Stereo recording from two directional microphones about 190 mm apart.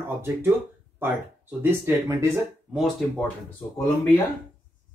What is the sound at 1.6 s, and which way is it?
Speech, 10° right (ahead or behind).